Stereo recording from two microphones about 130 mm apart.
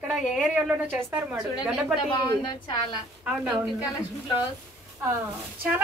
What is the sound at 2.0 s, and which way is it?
Speech, 40° left (ahead or behind).